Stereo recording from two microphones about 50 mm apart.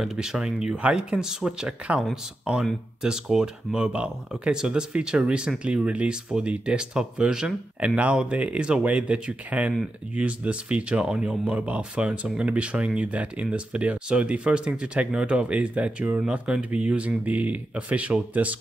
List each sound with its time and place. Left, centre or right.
0.0 s speech: centre
0.7 s speech: right
16.2 s speech: centre